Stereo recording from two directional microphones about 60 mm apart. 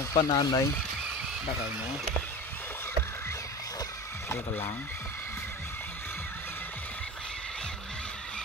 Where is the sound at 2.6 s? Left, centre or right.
Left.